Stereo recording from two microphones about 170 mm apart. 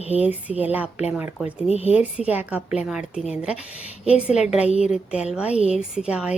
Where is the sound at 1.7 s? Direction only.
40° left (ahead or behind).